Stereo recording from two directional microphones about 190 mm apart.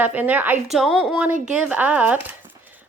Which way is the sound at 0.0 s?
10° right (ahead or behind).